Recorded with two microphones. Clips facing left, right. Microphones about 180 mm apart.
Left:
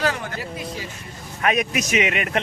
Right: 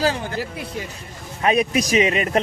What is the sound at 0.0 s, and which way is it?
Speech, 30° right (ahead or behind).